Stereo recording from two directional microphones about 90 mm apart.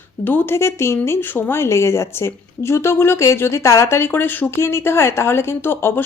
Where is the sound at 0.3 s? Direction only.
25° left (ahead or behind).